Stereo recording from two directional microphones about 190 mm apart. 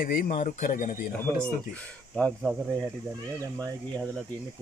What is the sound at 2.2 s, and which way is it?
Speech, 10° left (ahead or behind).